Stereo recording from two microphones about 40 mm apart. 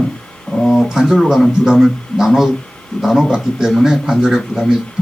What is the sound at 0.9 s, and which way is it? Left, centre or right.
Speech, centre.